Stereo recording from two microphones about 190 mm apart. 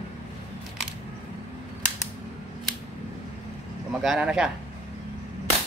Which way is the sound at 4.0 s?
5° right (ahead or behind).